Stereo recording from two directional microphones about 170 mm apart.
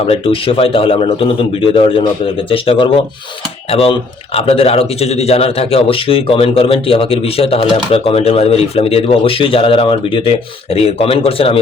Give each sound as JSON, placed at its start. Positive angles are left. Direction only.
{"t": 0.1, "sound": "speech", "side_deg": 35}